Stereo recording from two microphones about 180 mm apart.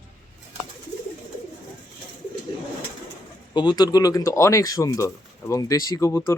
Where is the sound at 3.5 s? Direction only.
25° left (ahead or behind).